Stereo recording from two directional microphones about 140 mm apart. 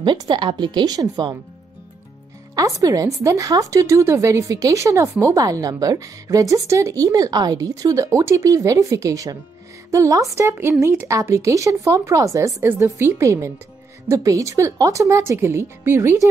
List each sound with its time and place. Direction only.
0.0 s a woman's voice: 35° right (ahead or behind)
2.5 s a woman's voice: 25° right (ahead or behind)